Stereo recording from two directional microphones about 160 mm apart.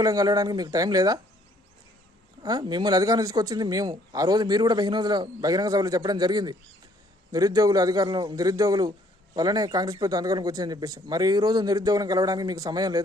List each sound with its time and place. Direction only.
0.0 s speech: 20° right (ahead or behind)
2.4 s speech: 25° right (ahead or behind)